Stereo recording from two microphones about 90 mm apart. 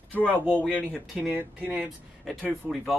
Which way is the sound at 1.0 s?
10° right (ahead or behind).